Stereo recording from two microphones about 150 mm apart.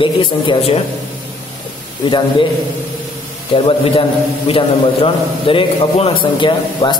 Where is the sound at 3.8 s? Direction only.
35° left (ahead or behind).